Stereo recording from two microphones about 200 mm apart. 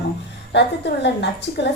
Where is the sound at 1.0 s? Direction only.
60° left (ahead or behind).